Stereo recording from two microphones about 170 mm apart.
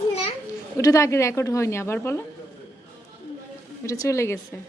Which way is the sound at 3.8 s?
20° left (ahead or behind).